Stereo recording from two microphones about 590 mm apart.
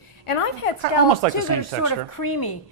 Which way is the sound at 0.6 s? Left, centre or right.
Left.